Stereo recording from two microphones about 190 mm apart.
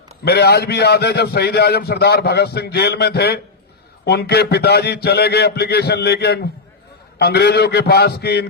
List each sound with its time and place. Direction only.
0.3 s a man's voice: 55° left (ahead or behind)